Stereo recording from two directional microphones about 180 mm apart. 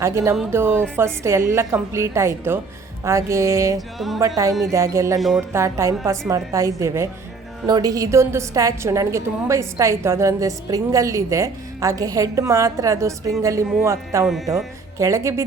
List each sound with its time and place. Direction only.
0.0 s a woman's voice: 15° right (ahead or behind)
3.8 s music: centre (ahead or behind)
4.7 s a woman's voice: 15° right (ahead or behind)